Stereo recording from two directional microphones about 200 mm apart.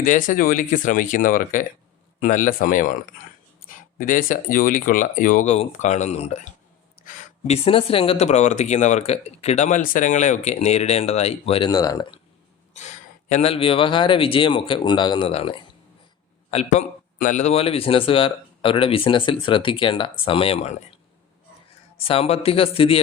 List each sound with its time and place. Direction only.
0.0 s speech: 40° left (ahead or behind); by 12.2 s 25° left (ahead or behind)
12.7 s a man's voice: 35° left (ahead or behind)
21.9 s a man's voice: 30° left (ahead or behind)